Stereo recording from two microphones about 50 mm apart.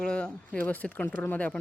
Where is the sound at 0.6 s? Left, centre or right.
Left.